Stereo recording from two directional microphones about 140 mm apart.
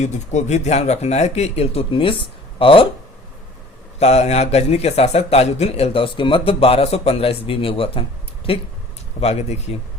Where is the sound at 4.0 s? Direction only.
50° left (ahead or behind).